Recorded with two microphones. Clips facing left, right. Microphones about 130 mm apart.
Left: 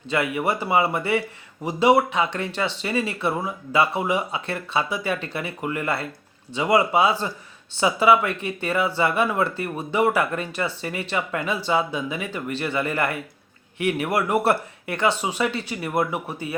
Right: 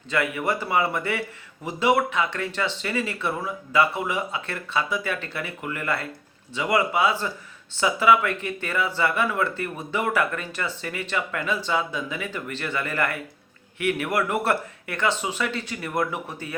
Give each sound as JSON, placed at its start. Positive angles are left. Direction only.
{"t": 0.1, "sound": "speech", "side_deg": 25}